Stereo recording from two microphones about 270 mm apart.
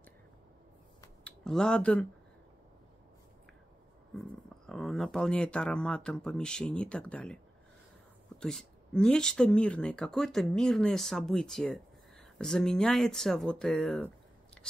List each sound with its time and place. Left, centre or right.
1.0 s a sound: centre
4.1 s speech: centre
8.4 s speech: centre